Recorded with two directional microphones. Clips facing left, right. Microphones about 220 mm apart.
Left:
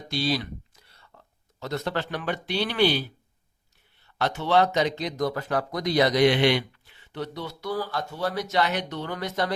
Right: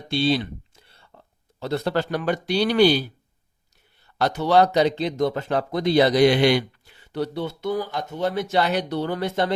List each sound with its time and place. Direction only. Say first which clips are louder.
0.1 s speech: right 5 dB; 25° right (ahead or behind)
4.0 s speech: right 5 dB; 40° right (ahead or behind)